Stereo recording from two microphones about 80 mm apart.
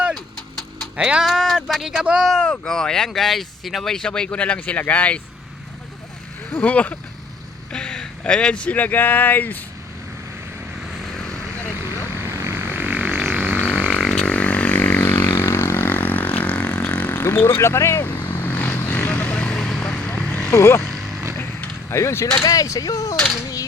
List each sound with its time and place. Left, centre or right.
0.9 s speech: centre
1.2 s speech: centre
2.2 s speech: centre
6.5 s speech: centre
12.1 s vehicle: right
12.7 s a sound: right
13.9 s didgeridoo: centre
14.3 s a sound: centre
15.4 s vehicle: left
17.6 s vehicle: left; by 20.5 s centre
20.5 s speech: left
21.8 s speech: left
22.4 s speech: left